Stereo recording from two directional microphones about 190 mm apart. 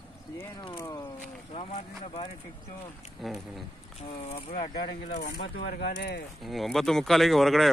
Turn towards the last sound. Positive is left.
turn(degrees=0)  # may be behind; listen again after turning